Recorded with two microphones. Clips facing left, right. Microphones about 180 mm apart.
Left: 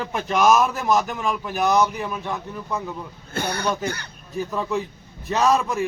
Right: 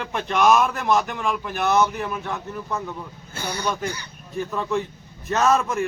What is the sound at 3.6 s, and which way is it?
A man's voice, 10° left (ahead or behind).